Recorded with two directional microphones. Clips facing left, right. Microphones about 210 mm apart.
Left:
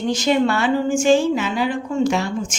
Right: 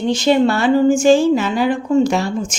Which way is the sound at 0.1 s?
30° right (ahead or behind).